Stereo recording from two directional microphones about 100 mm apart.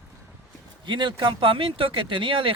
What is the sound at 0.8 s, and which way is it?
Speech, 50° right (ahead or behind).